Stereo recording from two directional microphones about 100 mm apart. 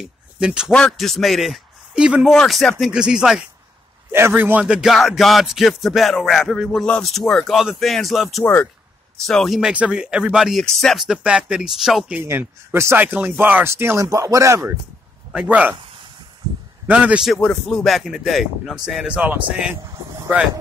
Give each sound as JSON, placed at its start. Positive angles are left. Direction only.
{"t": 0.0, "sound": "speech", "side_deg": -10}
{"t": 0.7, "sound": "a man's voice", "side_deg": 5}
{"t": 2.3, "sound": "speech", "side_deg": 5}
{"t": 2.8, "sound": "speech", "side_deg": -10}
{"t": 4.1, "sound": "speech", "side_deg": -20}
{"t": 12.1, "sound": "speech", "side_deg": -20}
{"t": 15.3, "sound": "speech", "side_deg": -15}
{"t": 16.8, "sound": "a man's voice", "side_deg": -15}
{"t": 17.4, "sound": "speech", "side_deg": 5}